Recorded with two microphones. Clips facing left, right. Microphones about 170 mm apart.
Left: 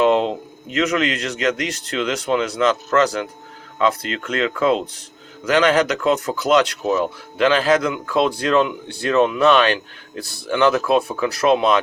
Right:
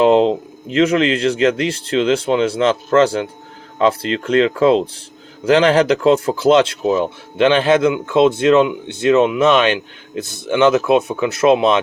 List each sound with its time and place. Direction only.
0.0 s speech: 30° right (ahead or behind)